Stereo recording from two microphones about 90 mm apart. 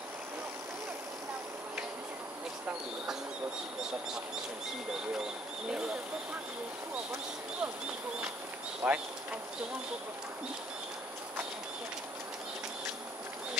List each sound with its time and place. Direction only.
5.1 s speech: 5° right (ahead or behind)
8.8 s speech: 15° right (ahead or behind)